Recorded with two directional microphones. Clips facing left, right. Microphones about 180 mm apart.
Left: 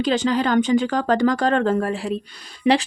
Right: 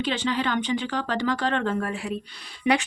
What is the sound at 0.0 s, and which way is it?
Speech, 40° left (ahead or behind).